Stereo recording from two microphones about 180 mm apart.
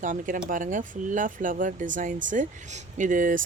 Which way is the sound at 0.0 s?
45° right (ahead or behind).